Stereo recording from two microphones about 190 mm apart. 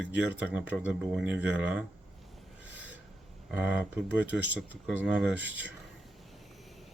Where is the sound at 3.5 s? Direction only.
5° right (ahead or behind).